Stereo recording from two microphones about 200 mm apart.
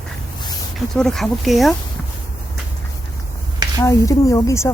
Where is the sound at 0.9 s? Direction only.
Centre (ahead or behind).